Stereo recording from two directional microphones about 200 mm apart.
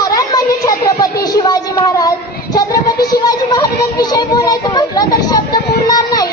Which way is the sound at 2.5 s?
20° left (ahead or behind).